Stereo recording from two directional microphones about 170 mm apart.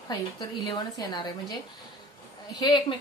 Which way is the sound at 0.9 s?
25° left (ahead or behind).